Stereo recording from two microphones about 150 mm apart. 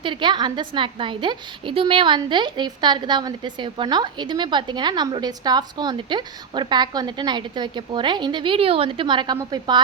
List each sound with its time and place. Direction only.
0.0 s a woman's voice: 30° right (ahead or behind)